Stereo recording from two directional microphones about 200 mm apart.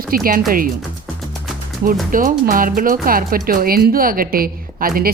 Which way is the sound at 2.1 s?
45° right (ahead or behind).